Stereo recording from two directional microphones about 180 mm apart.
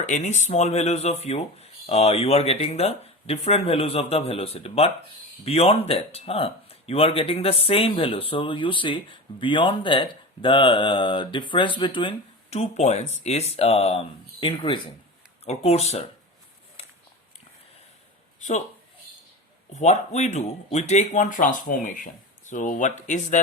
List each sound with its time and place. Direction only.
0.0 s speech: 40° left (ahead or behind)
19.7 s speech: 40° left (ahead or behind)